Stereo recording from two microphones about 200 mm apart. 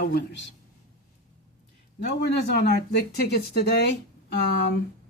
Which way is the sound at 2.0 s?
55° left (ahead or behind).